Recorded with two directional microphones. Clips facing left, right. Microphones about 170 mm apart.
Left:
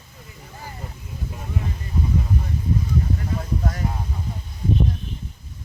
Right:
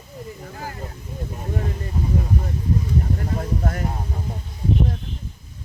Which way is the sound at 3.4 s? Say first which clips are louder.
Right 2 dB; 50° right (ahead or behind).